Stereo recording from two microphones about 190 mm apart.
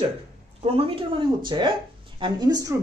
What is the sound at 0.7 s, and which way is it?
Speech, 30° right (ahead or behind).